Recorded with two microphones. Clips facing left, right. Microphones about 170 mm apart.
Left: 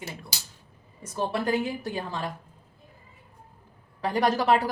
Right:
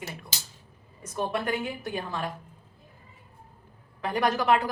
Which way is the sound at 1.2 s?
30° left (ahead or behind).